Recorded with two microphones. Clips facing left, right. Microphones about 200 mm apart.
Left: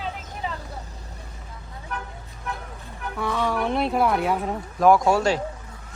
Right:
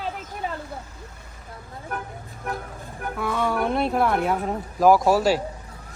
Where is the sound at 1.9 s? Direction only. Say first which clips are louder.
Right 2 dB; 50° right (ahead or behind).